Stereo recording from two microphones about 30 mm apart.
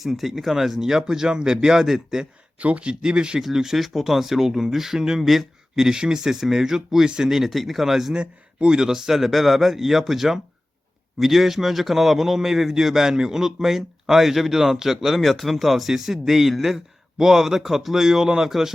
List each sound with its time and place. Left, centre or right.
0.0 s a man's voice: centre
2.6 s speech: right
3.0 s speech: right
3.4 s a man's voice: centre
5.2 s speech: centre
5.7 s a man's voice: right
8.2 s a man's voice: right
8.9 s a man's voice: centre